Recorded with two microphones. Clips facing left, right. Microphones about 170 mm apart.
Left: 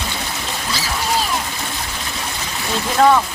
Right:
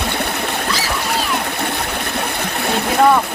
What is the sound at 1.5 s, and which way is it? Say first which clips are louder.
Stream: right 6 dB; 60° right (ahead or behind).